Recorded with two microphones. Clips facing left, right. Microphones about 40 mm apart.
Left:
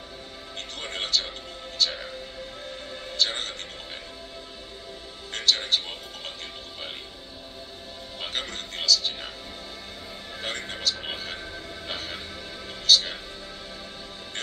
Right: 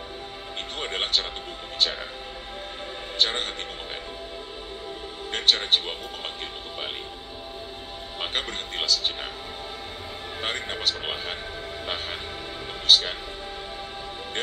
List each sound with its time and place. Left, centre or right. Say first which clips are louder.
0.7 s music: right 2 dB; right
1.8 s a man's voice: right 1 dB; right
3.2 s a man's voice: right 2 dB; right
5.3 s a man's voice: right 2 dB; right
8.2 s a man's voice: right 3 dB; right
10.4 s a man's voice: right 2 dB; right